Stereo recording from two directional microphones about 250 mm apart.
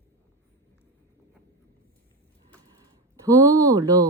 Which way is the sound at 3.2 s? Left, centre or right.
Centre.